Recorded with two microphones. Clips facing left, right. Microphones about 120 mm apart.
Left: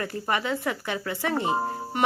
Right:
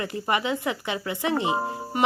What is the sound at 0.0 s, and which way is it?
A woman's voice, 10° right (ahead or behind).